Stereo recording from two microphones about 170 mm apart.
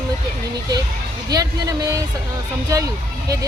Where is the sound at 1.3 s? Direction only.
20° right (ahead or behind).